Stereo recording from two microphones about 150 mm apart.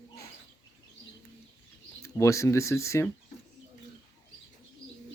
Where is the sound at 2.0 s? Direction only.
20° left (ahead or behind).